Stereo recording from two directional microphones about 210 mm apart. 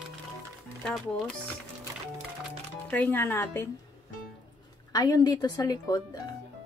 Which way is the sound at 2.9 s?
10° left (ahead or behind).